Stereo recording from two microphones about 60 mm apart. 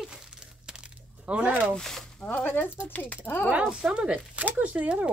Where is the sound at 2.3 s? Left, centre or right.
Left.